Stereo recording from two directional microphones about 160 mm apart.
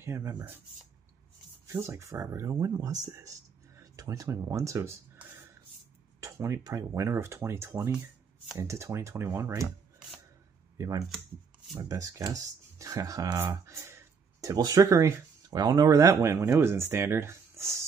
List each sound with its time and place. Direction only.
0.0 s speech: 20° right (ahead or behind)
1.7 s speech: 20° right (ahead or behind)
10.8 s speech: 20° right (ahead or behind)